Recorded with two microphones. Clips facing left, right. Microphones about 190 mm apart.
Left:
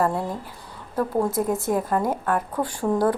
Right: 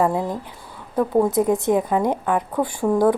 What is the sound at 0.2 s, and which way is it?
A woman's voice, 20° right (ahead or behind).